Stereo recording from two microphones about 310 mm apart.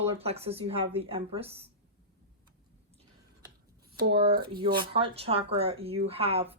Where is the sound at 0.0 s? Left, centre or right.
Centre.